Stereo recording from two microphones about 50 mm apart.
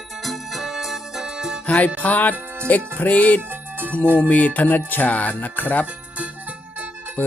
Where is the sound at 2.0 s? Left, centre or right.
Left.